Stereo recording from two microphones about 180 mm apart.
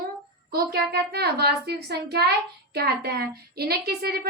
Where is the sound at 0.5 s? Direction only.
60° right (ahead or behind).